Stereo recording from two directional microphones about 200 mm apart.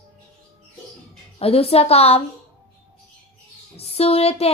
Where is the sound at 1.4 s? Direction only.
30° left (ahead or behind).